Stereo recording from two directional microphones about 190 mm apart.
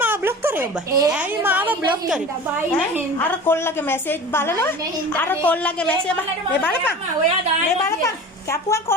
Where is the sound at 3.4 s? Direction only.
10° left (ahead or behind).